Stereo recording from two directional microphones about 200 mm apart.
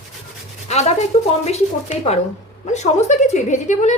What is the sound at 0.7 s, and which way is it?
A woman's voice, 35° left (ahead or behind).